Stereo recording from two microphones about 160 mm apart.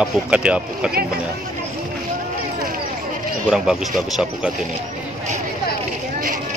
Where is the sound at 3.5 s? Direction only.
Centre (ahead or behind).